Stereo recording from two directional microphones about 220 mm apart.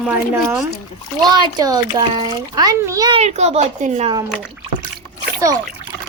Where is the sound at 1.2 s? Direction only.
20° right (ahead or behind).